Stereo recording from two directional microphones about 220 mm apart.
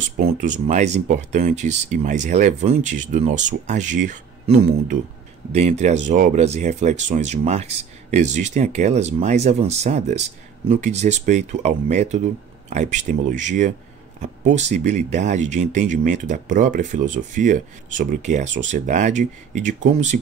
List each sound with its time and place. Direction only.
0.2 s speech: 35° right (ahead or behind)